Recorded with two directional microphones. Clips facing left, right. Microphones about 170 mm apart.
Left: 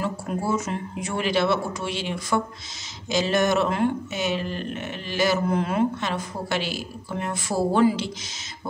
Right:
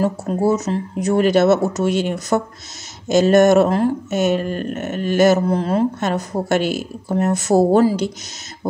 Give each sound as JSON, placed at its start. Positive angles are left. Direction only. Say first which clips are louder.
{"t": 0.0, "sound": "speech", "louder": "right 9 dB", "side_deg": -40}